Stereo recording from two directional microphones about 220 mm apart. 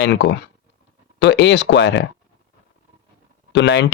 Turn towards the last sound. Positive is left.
turn(degrees=55)  # may be behind; listen again after turning